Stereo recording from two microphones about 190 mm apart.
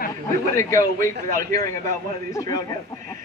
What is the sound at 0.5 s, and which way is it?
A woman's voice, 15° left (ahead or behind).